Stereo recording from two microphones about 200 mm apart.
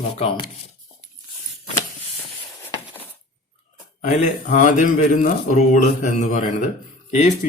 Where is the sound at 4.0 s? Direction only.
35° left (ahead or behind).